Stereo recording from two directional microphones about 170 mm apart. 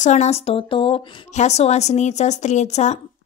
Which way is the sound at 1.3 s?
40° left (ahead or behind).